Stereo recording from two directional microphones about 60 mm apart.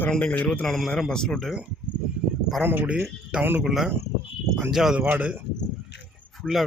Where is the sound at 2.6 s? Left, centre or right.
Right.